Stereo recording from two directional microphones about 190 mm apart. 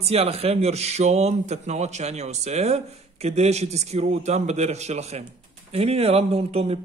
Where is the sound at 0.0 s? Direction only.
35° right (ahead or behind).